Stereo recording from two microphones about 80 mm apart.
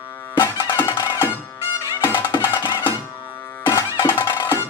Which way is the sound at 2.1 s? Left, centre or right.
Left.